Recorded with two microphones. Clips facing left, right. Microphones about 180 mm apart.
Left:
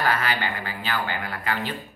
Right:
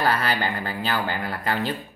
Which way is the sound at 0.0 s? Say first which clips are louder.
Right 2 dB; 35° right (ahead or behind).